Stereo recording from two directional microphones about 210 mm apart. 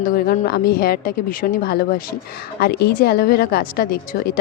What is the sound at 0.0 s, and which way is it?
A woman's voice, 45° left (ahead or behind).